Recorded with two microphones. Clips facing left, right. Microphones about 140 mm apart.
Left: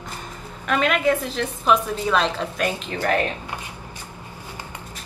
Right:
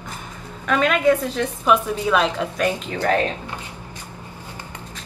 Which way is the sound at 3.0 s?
10° left (ahead or behind).